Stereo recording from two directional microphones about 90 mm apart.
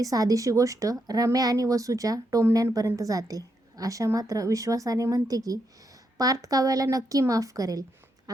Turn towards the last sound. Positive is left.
turn(degrees=-40)  # may be behind; listen again after turning